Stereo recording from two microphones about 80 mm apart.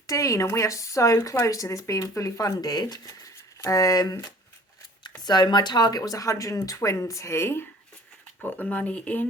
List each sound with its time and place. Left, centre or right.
0.1 s speech: left
5.2 s speech: left
6.0 s speech: left
8.4 s speech: left